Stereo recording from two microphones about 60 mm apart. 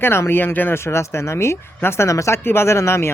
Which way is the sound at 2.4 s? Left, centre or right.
Left.